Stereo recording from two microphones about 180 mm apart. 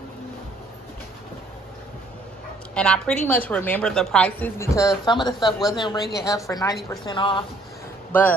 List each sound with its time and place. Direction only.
2.7 s a woman's voice: 5° left (ahead or behind); by 7.4 s 25° left (ahead or behind)